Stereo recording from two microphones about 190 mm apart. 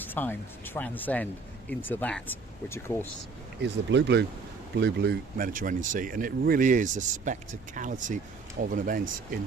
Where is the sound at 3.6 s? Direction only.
65° right (ahead or behind).